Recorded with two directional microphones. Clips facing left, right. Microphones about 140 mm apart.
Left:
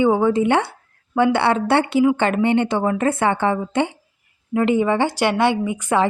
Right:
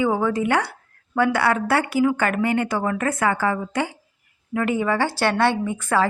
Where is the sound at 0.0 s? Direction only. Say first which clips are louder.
Left 5 dB; 25° left (ahead or behind).